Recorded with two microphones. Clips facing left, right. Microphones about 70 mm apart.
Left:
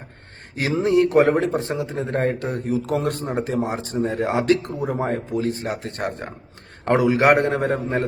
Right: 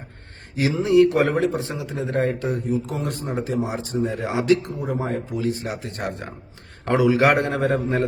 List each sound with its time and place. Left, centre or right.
0.5 s speech: left
0.8 s speech: left
2.6 s speech: left
3.0 s speech: left
4.0 s speech: left
4.9 s a man's voice: left